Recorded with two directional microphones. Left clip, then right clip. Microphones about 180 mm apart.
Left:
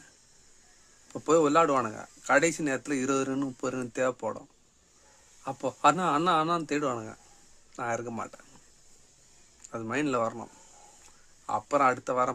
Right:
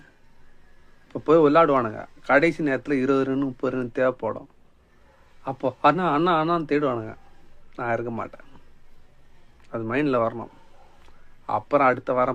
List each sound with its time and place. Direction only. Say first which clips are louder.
1.0 s speech: right 6 dB; 20° left (ahead or behind)
9.6 s speech: right 6 dB; 15° left (ahead or behind)